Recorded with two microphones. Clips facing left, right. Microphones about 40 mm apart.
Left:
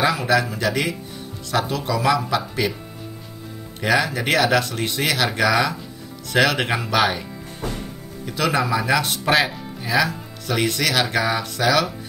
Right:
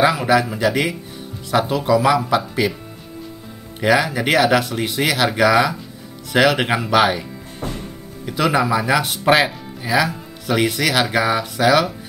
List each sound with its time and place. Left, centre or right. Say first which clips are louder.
0.0 s speech: right 3 dB; centre
3.8 s speech: right 3 dB; centre
8.3 s speech: right 3 dB; centre